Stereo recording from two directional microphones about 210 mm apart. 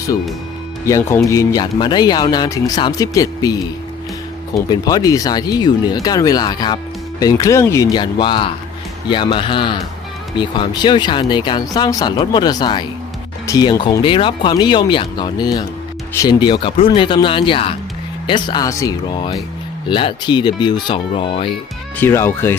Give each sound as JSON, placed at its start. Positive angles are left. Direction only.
{"t": 0.9, "sound": "speech", "side_deg": 15}
{"t": 21.9, "sound": "speech", "side_deg": 10}